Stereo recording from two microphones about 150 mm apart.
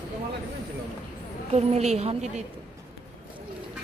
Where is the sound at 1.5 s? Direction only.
45° right (ahead or behind).